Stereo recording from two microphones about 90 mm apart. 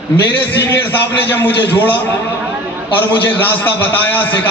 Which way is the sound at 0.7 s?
25° left (ahead or behind).